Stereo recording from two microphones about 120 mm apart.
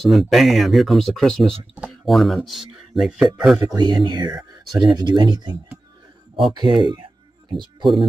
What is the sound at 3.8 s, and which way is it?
Speech, 35° right (ahead or behind).